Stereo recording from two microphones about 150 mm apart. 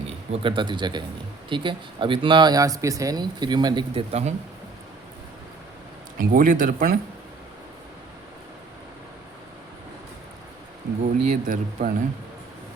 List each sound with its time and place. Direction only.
0.3 s speech: 35° right (ahead or behind)
4.1 s speech: 50° right (ahead or behind)
6.1 s speech: 70° right (ahead or behind)
11.0 s speech: 55° right (ahead or behind)